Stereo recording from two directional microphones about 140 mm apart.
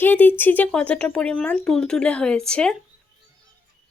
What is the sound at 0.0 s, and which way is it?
Speech, 15° left (ahead or behind).